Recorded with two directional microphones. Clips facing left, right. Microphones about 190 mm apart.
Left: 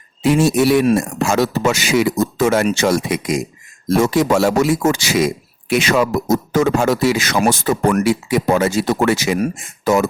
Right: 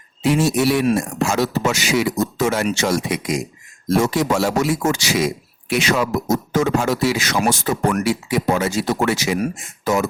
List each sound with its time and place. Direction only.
0.2 s speech: 50° left (ahead or behind)